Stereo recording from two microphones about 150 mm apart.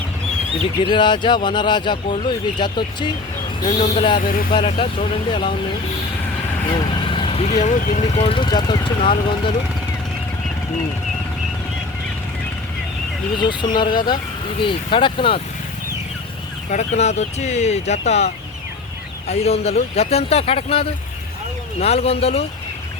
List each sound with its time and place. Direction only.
0.8 s speech: 30° left (ahead or behind)
4.2 s speech: 75° left (ahead or behind)
4.5 s speech: 35° left (ahead or behind)
6.7 s vehicle: 30° left (ahead or behind)
7.4 s speech: 55° left (ahead or behind); by 9.1 s 30° left (ahead or behind)
13.4 s speech: 30° left (ahead or behind)
16.6 s speech: 50° left (ahead or behind)
19.3 s speech: 45° left (ahead or behind)